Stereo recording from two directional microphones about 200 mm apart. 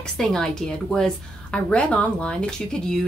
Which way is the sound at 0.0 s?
5° left (ahead or behind).